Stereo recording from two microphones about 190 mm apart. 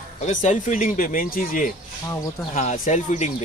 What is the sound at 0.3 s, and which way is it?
A man's voice, 40° left (ahead or behind).